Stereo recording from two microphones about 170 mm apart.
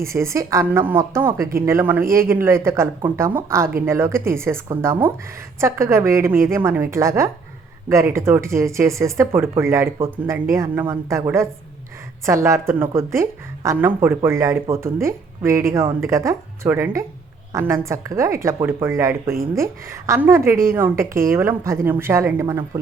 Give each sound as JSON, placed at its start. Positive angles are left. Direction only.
{"t": 0.0, "sound": "a woman's voice", "side_deg": -15}